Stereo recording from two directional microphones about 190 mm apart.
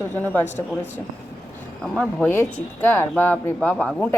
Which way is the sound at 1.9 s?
5° left (ahead or behind).